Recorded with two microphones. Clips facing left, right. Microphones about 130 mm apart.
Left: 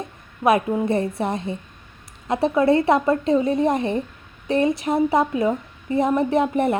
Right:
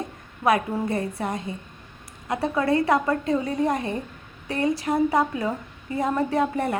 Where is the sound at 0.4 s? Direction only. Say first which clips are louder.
Left 4 dB; 20° left (ahead or behind).